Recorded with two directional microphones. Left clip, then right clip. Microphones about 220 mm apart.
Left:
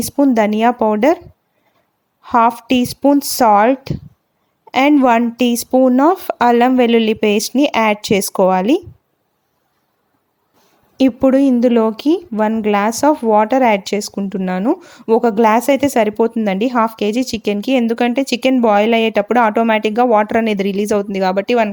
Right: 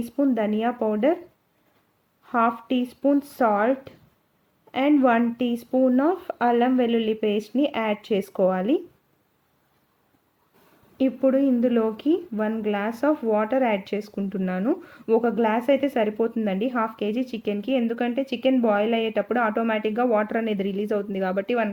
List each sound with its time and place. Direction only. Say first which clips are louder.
0.0 s speech: left 10 dB; 45° left (ahead or behind)
2.2 s speech: left 10 dB; 45° left (ahead or behind)
10.9 s speech: left 9 dB; 40° left (ahead or behind)